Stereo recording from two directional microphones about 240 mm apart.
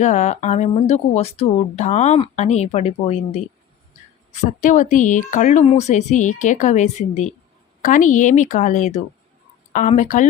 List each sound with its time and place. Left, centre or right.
0.0 s speech: left